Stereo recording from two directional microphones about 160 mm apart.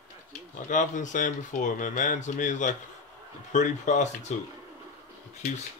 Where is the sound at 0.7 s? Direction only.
50° left (ahead or behind).